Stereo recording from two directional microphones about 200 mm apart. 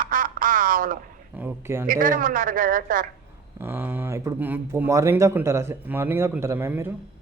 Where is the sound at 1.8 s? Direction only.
45° right (ahead or behind).